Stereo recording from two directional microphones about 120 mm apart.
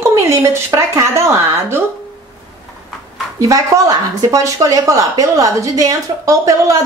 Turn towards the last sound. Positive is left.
turn(degrees=-25)  # may be behind; listen again after turning